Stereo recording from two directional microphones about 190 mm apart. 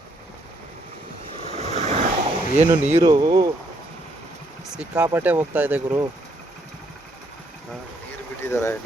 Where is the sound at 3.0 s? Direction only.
20° right (ahead or behind).